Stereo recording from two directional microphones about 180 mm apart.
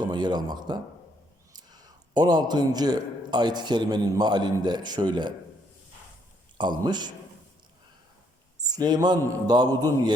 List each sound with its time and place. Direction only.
0.0 s a man's voice: 25° right (ahead or behind)
2.1 s a man's voice: 20° right (ahead or behind)
6.6 s a man's voice: 25° right (ahead or behind)
8.7 s a man's voice: 20° right (ahead or behind)